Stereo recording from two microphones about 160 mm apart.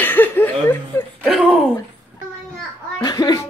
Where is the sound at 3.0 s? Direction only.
25° left (ahead or behind).